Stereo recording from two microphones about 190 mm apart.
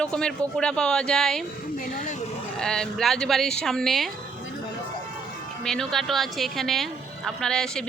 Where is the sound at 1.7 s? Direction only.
45° left (ahead or behind).